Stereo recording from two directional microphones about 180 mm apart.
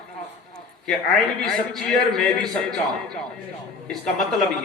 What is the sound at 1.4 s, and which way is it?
Speech, 5° left (ahead or behind).